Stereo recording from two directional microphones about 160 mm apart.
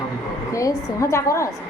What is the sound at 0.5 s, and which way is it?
Speech, 20° left (ahead or behind).